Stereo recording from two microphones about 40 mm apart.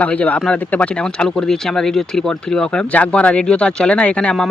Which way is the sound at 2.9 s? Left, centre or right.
Left.